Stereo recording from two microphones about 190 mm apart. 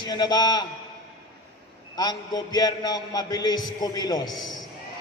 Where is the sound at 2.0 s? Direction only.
20° left (ahead or behind).